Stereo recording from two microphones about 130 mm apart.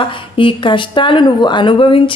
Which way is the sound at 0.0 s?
40° left (ahead or behind).